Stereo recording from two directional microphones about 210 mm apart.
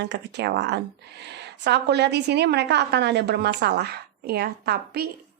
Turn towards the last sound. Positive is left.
turn(degrees=-50)  # may be behind; listen again after turning